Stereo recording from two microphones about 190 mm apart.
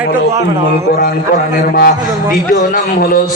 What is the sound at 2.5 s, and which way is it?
Speech, 45° left (ahead or behind).